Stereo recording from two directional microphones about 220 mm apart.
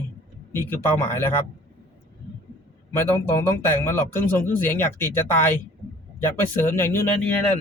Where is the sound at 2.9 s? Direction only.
10° left (ahead or behind).